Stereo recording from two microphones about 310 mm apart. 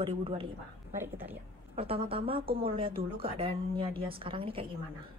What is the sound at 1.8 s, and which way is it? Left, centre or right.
A woman's voice, centre.